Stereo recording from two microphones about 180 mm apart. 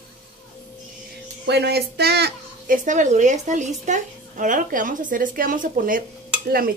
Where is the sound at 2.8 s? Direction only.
45° right (ahead or behind).